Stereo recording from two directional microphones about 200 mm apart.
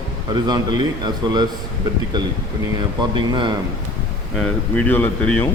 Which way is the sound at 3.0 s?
25° right (ahead or behind).